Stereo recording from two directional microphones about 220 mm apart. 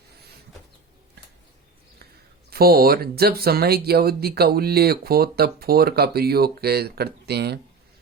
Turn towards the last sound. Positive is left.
turn(degrees=-50)  # may be behind; listen again after turning